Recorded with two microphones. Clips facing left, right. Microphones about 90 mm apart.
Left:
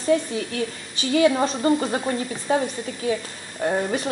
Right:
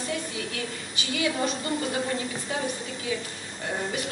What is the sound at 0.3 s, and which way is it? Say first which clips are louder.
A woman's voice: left 6 dB; 35° left (ahead or behind).